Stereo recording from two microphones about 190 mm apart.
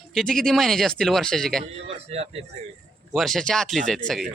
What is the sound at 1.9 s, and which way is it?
Speech, 35° right (ahead or behind).